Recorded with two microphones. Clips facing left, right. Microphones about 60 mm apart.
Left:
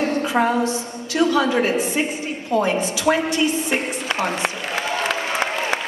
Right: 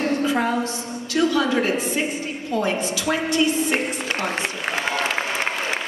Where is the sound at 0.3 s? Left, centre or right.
Left.